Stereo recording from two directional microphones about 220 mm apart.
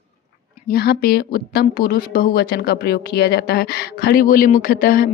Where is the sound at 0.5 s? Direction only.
45° left (ahead or behind).